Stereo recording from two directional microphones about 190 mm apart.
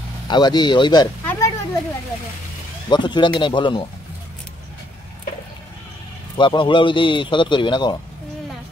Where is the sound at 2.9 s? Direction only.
25° left (ahead or behind).